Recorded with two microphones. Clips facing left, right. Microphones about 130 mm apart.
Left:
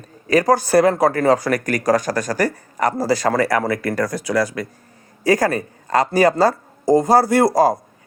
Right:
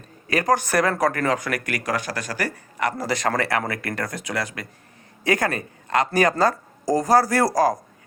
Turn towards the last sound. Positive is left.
turn(degrees=25)  # may be behind; listen again after turning